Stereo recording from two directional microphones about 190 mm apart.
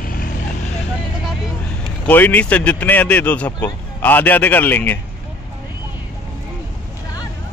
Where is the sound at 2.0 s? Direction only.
10° left (ahead or behind).